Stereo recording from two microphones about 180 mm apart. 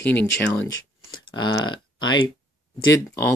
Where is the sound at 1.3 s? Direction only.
25° left (ahead or behind).